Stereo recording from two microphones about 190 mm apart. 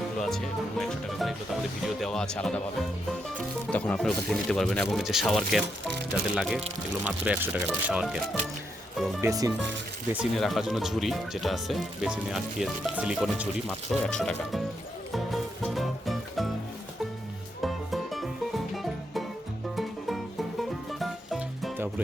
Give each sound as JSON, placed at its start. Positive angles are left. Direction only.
{"t": 0.2, "sound": "speech", "side_deg": 0}
{"t": 3.7, "sound": "speech", "side_deg": 5}
{"t": 9.2, "sound": "speech", "side_deg": -20}
{"t": 10.1, "sound": "speech", "side_deg": -5}
{"t": 13.7, "sound": "speech", "side_deg": 5}
{"t": 15.1, "sound": "music", "side_deg": 0}
{"t": 17.6, "sound": "music", "side_deg": 0}
{"t": 20.6, "sound": "music", "side_deg": 0}